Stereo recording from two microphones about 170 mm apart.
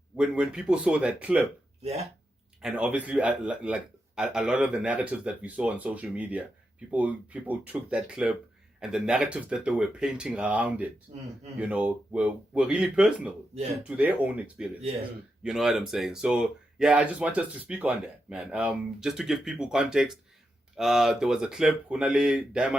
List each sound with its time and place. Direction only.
0.2 s speech: 5° right (ahead or behind)
1.8 s speech: 40° right (ahead or behind)
2.6 s a man's voice: 5° right (ahead or behind)